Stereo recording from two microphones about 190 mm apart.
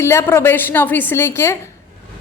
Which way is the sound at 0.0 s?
15° left (ahead or behind).